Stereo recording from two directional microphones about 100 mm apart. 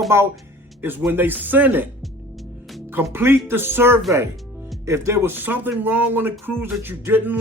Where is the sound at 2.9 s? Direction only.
20° right (ahead or behind).